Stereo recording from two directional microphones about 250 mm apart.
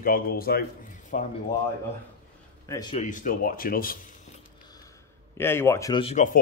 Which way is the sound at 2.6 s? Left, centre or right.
Centre.